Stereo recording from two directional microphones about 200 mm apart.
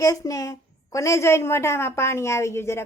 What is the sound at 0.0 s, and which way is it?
A woman's voice, 15° left (ahead or behind).